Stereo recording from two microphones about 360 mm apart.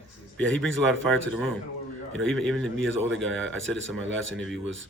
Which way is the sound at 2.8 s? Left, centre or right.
Right.